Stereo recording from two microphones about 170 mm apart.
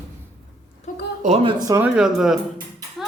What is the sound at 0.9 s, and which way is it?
Speech, 50° left (ahead or behind).